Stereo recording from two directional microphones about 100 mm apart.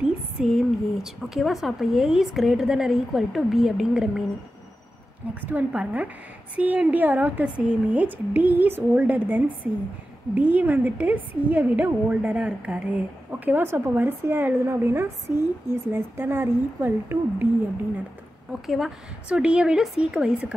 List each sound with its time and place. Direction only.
0.0 s a sound: 5° right (ahead or behind)
1.0 s a woman's voice: 5° right (ahead or behind)
5.3 s a woman's voice: 15° right (ahead or behind)
18.5 s speech: 5° right (ahead or behind)